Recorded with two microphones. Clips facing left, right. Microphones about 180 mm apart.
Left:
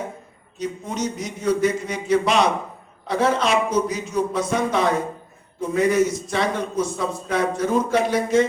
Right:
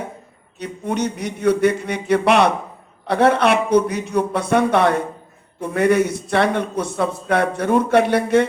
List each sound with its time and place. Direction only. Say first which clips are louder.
0.6 s a man's voice: right 3 dB; 65° right (ahead or behind)